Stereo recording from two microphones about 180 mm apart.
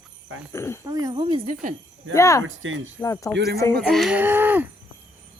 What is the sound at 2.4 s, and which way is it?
Speech, 90° right.